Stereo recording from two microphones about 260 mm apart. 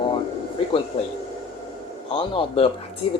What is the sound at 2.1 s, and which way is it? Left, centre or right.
Speech, centre.